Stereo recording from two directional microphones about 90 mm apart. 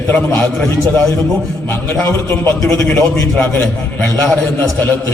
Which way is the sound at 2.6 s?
10° left (ahead or behind).